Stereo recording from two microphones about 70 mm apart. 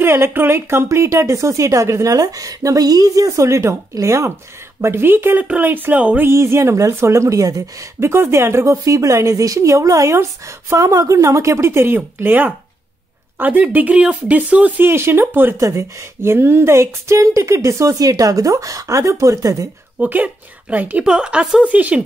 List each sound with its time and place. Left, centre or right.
0.0 s speech: right
4.8 s speech: right
6.2 s speech: right
8.0 s speech: right
14.9 s speech: right
15.5 s speech: right
20.0 s speech: right
21.0 s a woman's voice: centre
21.7 s speech: right